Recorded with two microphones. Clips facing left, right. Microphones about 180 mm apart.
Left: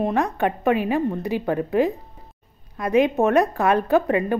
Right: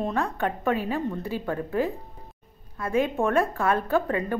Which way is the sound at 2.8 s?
80° left.